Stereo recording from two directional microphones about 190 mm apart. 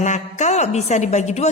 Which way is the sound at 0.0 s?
40° left (ahead or behind).